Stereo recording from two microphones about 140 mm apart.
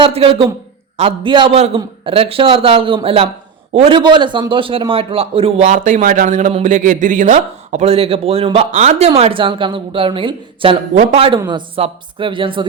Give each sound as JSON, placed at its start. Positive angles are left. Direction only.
{"t": 0.0, "sound": "a man's voice", "side_deg": -40}
{"t": 1.5, "sound": "a man's voice", "side_deg": -45}
{"t": 3.9, "sound": "a man's voice", "side_deg": -35}
{"t": 5.6, "sound": "speech", "side_deg": -65}
{"t": 11.3, "sound": "a man's voice", "side_deg": -30}